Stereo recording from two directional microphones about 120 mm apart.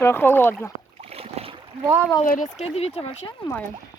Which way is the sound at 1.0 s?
55° right (ahead or behind).